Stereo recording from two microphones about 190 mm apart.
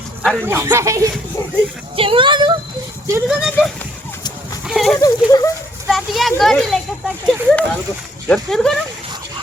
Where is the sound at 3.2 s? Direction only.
5° right (ahead or behind).